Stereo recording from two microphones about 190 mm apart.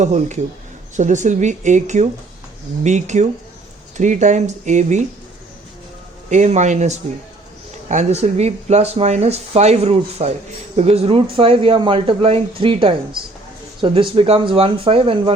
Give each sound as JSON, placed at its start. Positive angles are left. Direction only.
{"t": 0.0, "sound": "speech", "side_deg": -35}
{"t": 6.3, "sound": "speech", "side_deg": -40}